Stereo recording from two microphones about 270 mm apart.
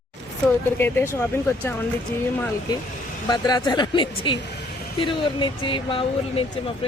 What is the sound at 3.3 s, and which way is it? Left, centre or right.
Speech, centre.